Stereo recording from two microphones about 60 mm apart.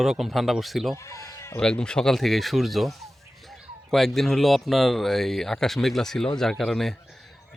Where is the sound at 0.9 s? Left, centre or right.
Left.